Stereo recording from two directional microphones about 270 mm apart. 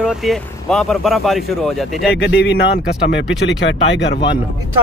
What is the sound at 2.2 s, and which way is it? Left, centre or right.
Speech, left.